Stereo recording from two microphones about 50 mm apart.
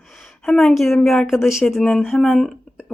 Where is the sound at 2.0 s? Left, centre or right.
Centre.